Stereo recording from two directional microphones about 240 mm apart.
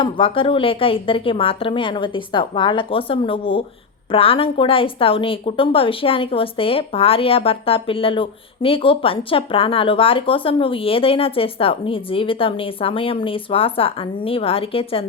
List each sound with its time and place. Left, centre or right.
0.0 s a woman's voice: left